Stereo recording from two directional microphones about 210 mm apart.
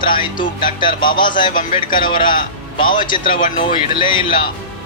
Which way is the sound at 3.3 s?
40° left (ahead or behind).